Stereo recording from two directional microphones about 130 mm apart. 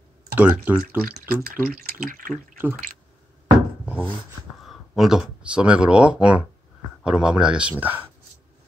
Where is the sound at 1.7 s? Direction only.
90° right.